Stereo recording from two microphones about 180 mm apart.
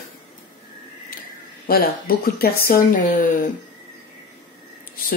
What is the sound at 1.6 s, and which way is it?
Speech, 55° left (ahead or behind).